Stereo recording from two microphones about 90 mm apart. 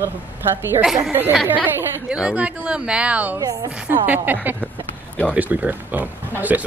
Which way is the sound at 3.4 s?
45° right (ahead or behind).